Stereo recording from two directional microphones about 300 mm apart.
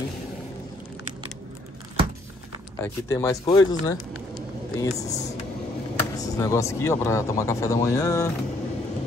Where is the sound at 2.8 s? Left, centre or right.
Centre.